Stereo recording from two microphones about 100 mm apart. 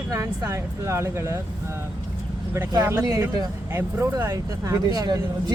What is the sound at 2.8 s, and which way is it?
Speech, 30° right (ahead or behind).